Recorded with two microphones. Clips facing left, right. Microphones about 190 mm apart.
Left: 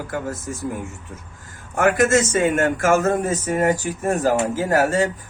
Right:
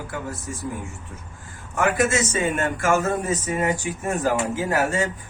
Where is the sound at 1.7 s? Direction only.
50° left (ahead or behind).